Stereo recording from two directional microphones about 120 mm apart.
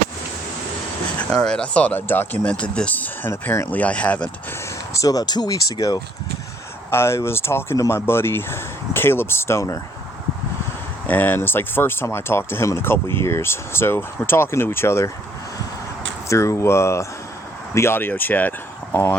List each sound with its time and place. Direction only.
1.3 s speech: 5° left (ahead or behind)
4.9 s speech: 30° left (ahead or behind)
6.9 s speech: 20° left (ahead or behind)
11.0 s speech: 15° left (ahead or behind)
16.3 s speech: 25° left (ahead or behind)